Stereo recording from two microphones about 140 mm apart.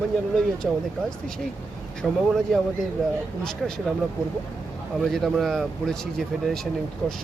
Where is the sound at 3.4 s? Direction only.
5° left (ahead or behind).